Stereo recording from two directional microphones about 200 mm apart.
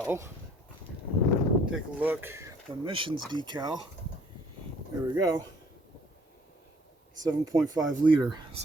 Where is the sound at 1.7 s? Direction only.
5° right (ahead or behind).